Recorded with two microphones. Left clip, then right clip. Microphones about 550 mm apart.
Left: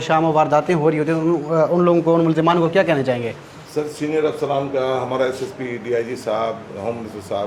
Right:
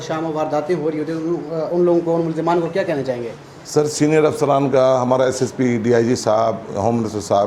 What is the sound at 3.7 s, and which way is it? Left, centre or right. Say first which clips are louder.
A man's voice: right 6 dB; right.